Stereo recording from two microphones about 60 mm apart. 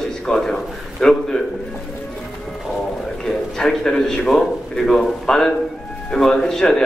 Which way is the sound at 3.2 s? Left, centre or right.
Centre.